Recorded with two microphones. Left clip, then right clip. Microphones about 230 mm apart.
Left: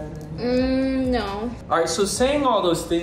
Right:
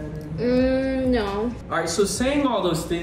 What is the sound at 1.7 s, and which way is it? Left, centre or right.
Speech, centre.